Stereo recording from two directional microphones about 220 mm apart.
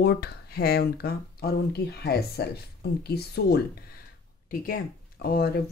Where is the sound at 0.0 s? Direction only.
45° left (ahead or behind).